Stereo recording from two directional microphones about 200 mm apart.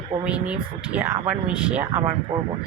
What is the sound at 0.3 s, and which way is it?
Speech, 5° right (ahead or behind).